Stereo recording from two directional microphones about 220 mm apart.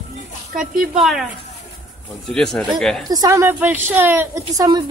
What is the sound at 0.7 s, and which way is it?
Speech, centre (ahead or behind).